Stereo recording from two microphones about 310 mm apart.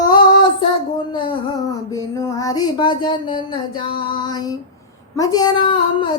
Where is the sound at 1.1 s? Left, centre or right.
Centre.